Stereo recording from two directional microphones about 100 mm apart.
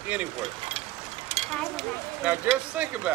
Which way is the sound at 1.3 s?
85° right.